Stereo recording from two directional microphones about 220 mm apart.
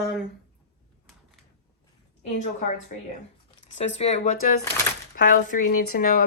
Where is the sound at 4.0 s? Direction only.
30° left (ahead or behind).